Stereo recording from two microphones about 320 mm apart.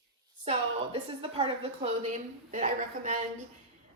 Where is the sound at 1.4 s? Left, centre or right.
Centre.